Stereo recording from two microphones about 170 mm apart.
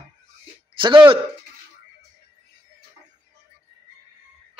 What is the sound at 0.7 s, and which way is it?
Speech, 30° right (ahead or behind).